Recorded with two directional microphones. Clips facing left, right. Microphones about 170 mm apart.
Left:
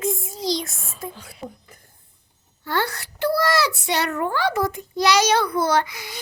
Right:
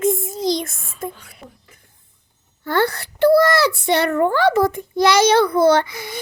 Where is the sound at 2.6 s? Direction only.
55° right (ahead or behind).